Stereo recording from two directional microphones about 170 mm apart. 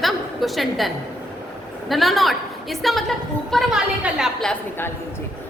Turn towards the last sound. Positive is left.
turn(degrees=10)  # may be behind; listen again after turning